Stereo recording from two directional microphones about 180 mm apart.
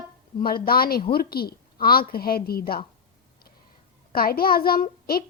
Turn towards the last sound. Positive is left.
turn(degrees=55)  # may be behind; listen again after turning